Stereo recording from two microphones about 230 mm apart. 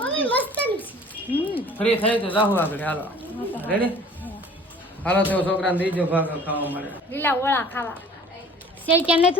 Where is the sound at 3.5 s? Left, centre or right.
Centre.